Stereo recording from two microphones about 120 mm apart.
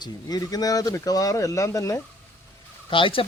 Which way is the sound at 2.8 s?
45° left (ahead or behind).